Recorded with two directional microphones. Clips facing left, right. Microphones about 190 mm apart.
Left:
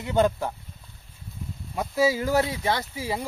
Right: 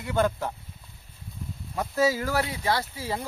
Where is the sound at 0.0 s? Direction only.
20° left (ahead or behind).